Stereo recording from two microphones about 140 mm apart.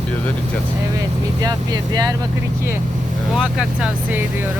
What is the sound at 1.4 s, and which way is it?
Speech, 30° right (ahead or behind).